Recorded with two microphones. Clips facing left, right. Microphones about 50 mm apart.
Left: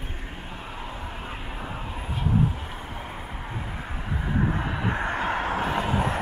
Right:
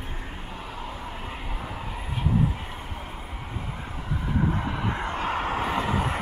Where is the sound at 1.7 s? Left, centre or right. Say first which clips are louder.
Even; left.